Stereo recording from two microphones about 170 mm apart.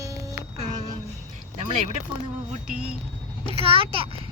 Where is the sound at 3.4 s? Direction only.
35° right (ahead or behind).